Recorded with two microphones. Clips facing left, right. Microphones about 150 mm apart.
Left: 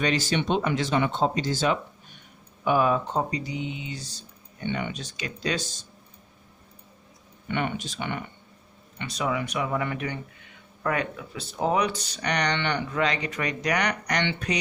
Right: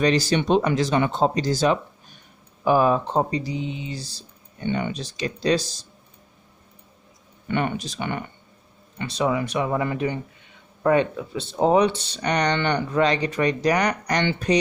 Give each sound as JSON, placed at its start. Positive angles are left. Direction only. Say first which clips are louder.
{"t": 0.0, "sound": "speech", "louder": "right 5 dB", "side_deg": -35}
{"t": 7.4, "sound": "speech", "louder": "right 4 dB", "side_deg": -45}
{"t": 9.0, "sound": "speech", "louder": "right 5 dB", "side_deg": -30}